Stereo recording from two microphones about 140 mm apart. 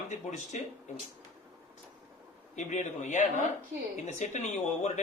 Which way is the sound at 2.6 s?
60° left (ahead or behind).